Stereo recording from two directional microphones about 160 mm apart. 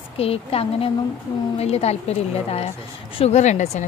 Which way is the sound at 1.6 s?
40° left (ahead or behind).